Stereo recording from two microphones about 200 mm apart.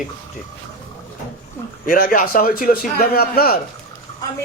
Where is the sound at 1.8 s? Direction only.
45° left (ahead or behind).